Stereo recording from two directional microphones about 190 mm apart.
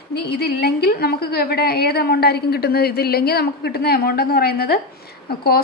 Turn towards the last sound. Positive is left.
turn(degrees=55)  # may be behind; listen again after turning